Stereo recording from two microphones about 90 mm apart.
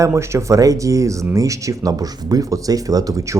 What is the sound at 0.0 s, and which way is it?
Speech, 30° right (ahead or behind).